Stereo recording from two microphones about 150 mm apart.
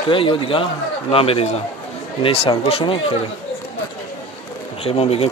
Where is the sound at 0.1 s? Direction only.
35° left (ahead or behind).